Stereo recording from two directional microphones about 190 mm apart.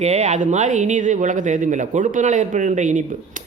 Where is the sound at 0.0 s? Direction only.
35° right (ahead or behind).